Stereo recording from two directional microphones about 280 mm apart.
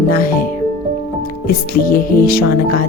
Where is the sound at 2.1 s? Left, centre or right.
Left.